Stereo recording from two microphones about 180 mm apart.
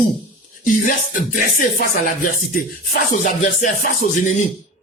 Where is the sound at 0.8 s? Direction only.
50° left (ahead or behind).